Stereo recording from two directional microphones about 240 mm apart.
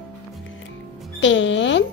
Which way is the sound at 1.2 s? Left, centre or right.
Left.